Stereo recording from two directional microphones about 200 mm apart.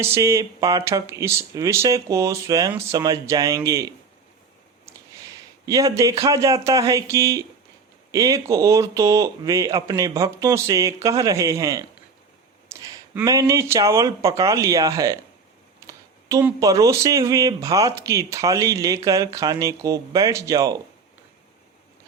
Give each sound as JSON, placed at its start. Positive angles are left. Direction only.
{"t": 0.0, "sound": "speech", "side_deg": -15}